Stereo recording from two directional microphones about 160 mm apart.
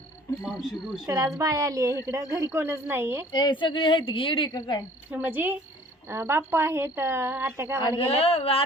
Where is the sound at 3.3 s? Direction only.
30° left (ahead or behind).